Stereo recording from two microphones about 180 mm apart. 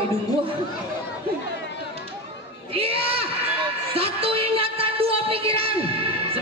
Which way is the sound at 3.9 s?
30° right (ahead or behind).